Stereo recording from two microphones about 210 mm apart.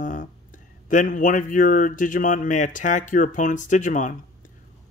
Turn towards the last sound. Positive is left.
turn(degrees=35)  # may be behind; listen again after turning